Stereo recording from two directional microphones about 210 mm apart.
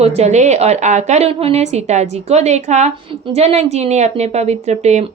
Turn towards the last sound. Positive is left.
turn(degrees=-30)  # may be behind; listen again after turning